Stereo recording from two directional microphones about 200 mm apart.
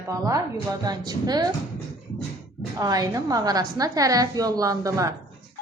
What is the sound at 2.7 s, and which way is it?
A woman's voice, 20° right (ahead or behind).